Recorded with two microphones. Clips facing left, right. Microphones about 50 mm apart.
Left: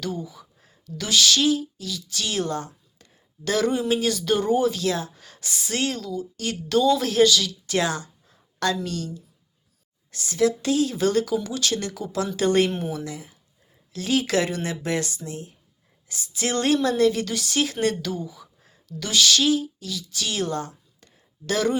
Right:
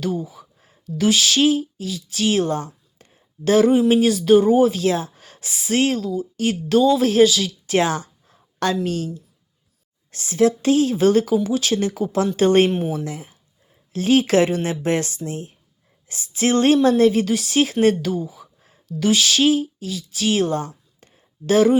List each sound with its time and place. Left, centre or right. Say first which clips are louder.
0.0 s a woman's voice: right 6 dB; centre
0.3 s a sound: right 3 dB; right
0.9 s speech: right 3 dB; centre
1.4 s a woman's voice: right 5 dB; right
6.0 s a woman's voice: right 7 dB; centre
7.0 s a woman's voice: right 4 dB; right
7.7 s a woman's voice: right 5 dB; right
8.3 s a sound: right 3 dB; right
10.1 s a woman's voice: right 4 dB; right
12.0 s a woman's voice: right 5 dB; right
17.7 s a woman's voice: right 7 dB; centre
19.4 s speech: right 4 dB; right